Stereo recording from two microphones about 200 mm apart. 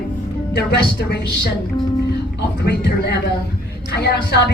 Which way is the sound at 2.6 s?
55° left (ahead or behind).